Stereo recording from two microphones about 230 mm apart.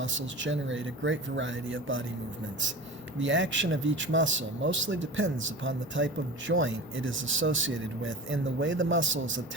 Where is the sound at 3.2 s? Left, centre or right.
Right.